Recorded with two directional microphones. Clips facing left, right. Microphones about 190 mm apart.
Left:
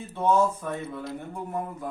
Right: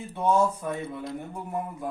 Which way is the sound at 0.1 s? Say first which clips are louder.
Left 1 dB; 15° right (ahead or behind).